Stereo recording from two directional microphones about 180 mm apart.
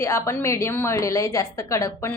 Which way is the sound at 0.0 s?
15° left (ahead or behind).